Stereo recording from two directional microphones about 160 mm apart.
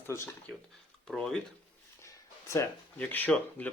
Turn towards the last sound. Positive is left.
turn(degrees=10)  # may be behind; listen again after turning